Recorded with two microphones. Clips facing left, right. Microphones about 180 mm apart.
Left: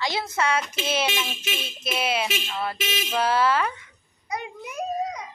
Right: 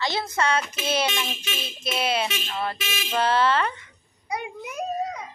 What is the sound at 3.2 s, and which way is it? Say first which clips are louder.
Speech: right 1 dB; 5° left (ahead or behind).